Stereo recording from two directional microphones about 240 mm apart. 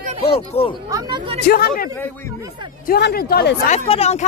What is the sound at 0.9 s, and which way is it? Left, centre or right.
Speech, centre.